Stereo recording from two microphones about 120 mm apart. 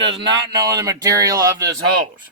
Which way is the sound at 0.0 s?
45° right (ahead or behind).